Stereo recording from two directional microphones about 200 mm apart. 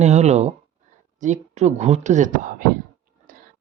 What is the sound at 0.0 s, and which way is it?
Speech, 35° right (ahead or behind).